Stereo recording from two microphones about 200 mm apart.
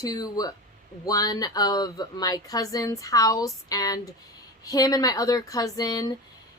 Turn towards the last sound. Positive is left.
turn(degrees=20)  # may be behind; listen again after turning